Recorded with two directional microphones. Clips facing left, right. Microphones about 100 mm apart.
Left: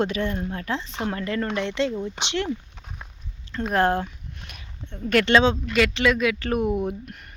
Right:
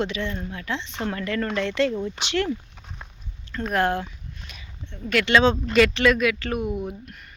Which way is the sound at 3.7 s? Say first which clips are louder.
Left 2 dB; 30° left (ahead or behind).